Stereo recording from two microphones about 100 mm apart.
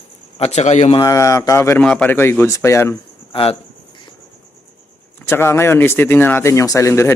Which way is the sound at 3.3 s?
70° left (ahead or behind).